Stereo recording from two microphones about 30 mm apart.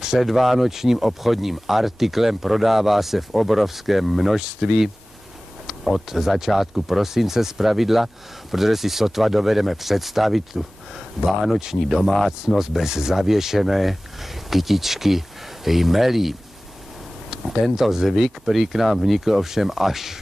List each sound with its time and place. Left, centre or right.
0.2 s speech: centre
4.6 s speech: centre
11.6 s speech: centre
17.3 s a sound: centre
17.8 s speech: centre